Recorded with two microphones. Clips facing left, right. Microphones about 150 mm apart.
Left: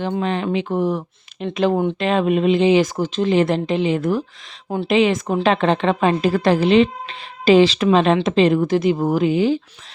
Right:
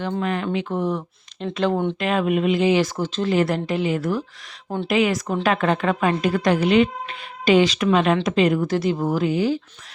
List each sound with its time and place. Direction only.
0.0 s speech: 20° left (ahead or behind)
2.0 s a woman's voice: 30° left (ahead or behind)